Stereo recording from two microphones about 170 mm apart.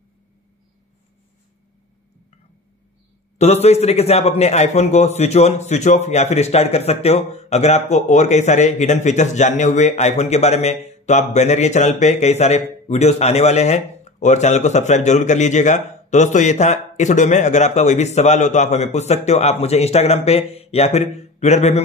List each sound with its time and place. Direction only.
3.3 s a man's voice: 40° left (ahead or behind)